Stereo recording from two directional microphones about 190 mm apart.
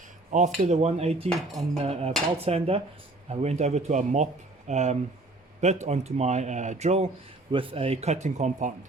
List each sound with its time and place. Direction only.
0.3 s speech: 40° right (ahead or behind)
1.3 s cutlery: centre (ahead or behind)
1.8 s speech: 30° right (ahead or behind)